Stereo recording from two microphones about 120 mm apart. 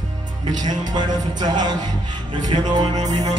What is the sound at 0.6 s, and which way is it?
Music, 35° right (ahead or behind).